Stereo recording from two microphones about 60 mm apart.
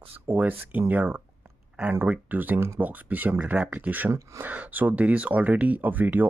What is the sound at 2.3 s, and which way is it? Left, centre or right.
Speech, right.